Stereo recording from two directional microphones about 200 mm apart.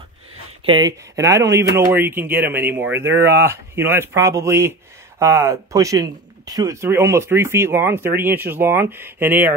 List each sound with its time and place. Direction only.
0.7 s speech: 20° right (ahead or behind)